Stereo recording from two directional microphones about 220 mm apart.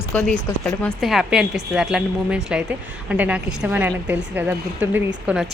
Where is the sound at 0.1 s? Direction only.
5° left (ahead or behind).